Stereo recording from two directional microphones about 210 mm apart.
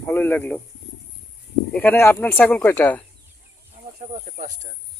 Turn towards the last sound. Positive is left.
turn(degrees=-35)  # may be behind; listen again after turning